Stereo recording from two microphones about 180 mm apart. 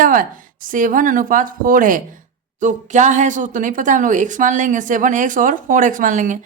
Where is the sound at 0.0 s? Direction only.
50° right (ahead or behind).